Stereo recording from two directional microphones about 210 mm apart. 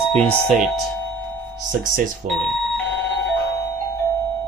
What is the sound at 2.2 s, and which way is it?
Speech, 35° right (ahead or behind).